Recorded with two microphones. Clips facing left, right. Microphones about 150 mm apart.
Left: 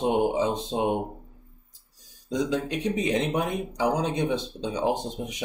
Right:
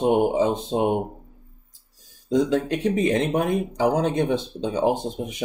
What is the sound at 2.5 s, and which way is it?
Speech, 55° right (ahead or behind).